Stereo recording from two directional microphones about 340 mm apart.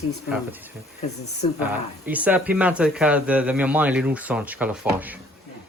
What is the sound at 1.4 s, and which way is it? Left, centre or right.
Speech, centre.